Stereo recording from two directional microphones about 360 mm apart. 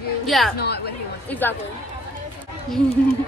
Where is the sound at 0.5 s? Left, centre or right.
Left.